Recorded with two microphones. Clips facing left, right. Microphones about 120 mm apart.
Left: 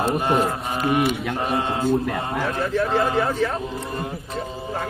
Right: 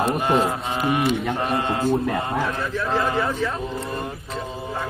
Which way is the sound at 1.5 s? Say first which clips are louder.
Left 1 dB; 15° left (ahead or behind).